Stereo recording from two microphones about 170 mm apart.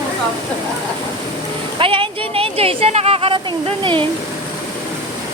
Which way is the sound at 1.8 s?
30° right (ahead or behind).